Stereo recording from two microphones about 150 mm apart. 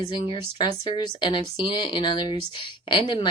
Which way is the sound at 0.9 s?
30° left (ahead or behind).